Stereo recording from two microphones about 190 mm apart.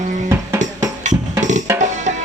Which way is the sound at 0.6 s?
40° right (ahead or behind).